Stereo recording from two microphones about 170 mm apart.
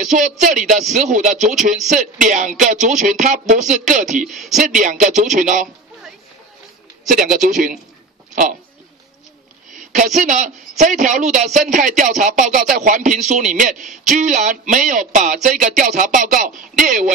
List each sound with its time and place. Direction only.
0.0 s a man's voice: 45° right (ahead or behind)
1.3 s speech: centre (ahead or behind)
1.9 s a man's voice: 50° right (ahead or behind)
7.1 s a man's voice: 50° right (ahead or behind)
9.8 s a man's voice: 45° right (ahead or behind)